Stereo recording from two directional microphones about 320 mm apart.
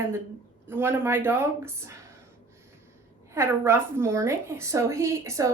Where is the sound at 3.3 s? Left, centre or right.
Centre.